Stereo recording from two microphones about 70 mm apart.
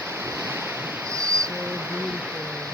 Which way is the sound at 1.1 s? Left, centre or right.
Right.